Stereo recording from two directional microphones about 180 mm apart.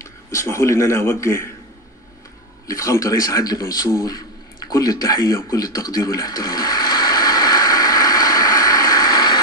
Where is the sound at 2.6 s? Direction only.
20° left (ahead or behind).